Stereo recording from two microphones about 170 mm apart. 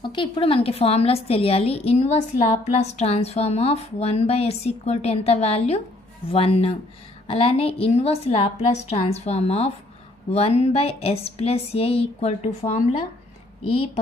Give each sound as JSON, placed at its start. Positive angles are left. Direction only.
{"t": 0.0, "sound": "a woman's voice", "side_deg": 30}